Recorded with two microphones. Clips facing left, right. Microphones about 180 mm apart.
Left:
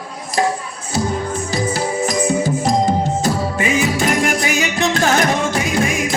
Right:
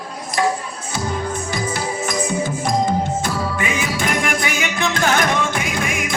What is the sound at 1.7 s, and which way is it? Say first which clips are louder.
Music: left 4 dB; 40° left (ahead or behind).